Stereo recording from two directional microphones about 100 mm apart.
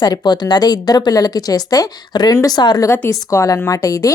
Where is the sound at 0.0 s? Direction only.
45° left (ahead or behind).